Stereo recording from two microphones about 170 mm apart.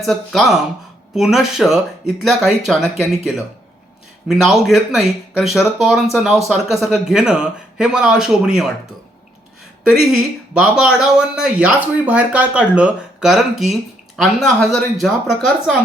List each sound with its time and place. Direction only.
0.0 s speech: centre (ahead or behind)
10.5 s speech: 5° right (ahead or behind)